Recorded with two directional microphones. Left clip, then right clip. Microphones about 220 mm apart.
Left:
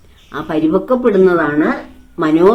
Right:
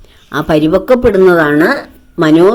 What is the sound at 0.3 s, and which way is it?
Speech, 35° right (ahead or behind).